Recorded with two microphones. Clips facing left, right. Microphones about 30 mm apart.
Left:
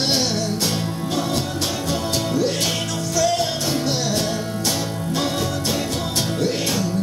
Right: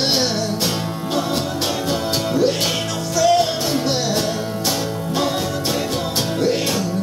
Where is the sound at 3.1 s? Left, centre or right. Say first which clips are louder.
Right 5 dB; centre.